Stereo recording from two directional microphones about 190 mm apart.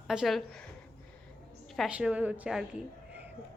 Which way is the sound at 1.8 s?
5° right (ahead or behind).